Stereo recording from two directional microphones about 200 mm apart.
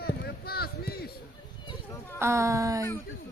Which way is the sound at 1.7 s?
15° left (ahead or behind).